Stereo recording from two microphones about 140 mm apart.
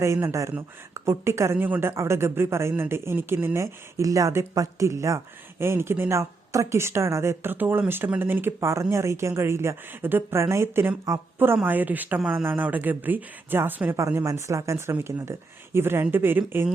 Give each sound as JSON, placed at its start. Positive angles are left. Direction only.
{"t": 0.0, "sound": "a woman's voice", "side_deg": -20}